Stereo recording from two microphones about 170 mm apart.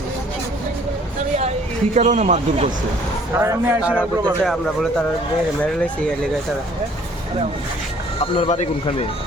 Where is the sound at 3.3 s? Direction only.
15° right (ahead or behind).